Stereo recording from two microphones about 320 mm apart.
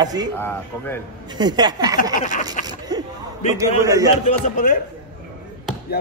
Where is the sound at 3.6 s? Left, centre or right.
Centre.